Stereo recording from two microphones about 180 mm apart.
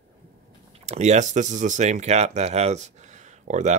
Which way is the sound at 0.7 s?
40° right (ahead or behind).